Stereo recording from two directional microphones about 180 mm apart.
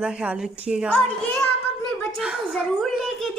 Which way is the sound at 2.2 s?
5° right (ahead or behind).